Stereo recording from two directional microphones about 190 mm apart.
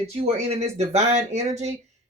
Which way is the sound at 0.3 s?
30° right (ahead or behind).